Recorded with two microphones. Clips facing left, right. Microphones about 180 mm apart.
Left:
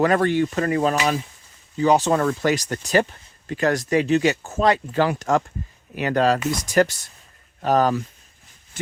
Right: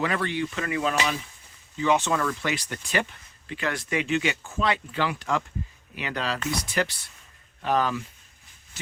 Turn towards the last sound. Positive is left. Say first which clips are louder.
# left 6 dB
turn(degrees=40)  # may be behind; listen again after turning